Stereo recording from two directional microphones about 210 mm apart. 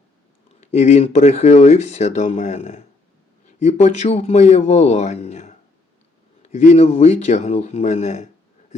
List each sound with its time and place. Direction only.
0.6 s speech: 35° left (ahead or behind)